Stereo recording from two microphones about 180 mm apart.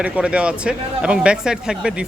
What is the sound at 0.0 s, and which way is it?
Speech, 5° right (ahead or behind).